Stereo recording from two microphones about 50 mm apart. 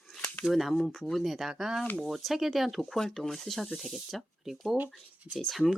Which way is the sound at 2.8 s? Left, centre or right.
Centre.